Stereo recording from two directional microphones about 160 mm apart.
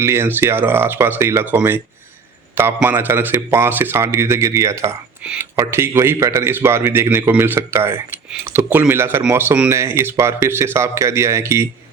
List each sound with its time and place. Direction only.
0.0 s a man's voice: 15° right (ahead or behind)